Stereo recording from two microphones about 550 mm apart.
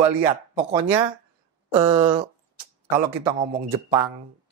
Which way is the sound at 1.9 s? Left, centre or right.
Centre.